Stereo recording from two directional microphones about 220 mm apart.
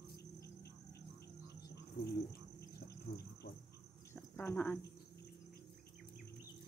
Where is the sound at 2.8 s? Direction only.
45° left (ahead or behind).